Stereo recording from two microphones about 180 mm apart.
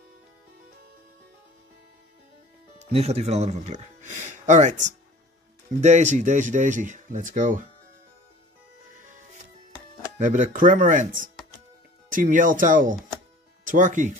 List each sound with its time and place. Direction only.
2.8 s speech: 35° right (ahead or behind)
10.2 s speech: 45° right (ahead or behind)